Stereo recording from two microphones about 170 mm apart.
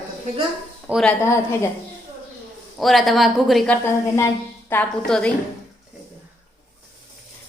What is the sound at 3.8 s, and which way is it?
Speech, 15° left (ahead or behind).